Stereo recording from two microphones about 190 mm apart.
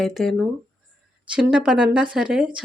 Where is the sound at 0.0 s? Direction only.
Centre (ahead or behind).